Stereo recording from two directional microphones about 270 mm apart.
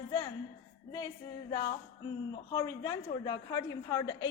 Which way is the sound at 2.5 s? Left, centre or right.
Centre.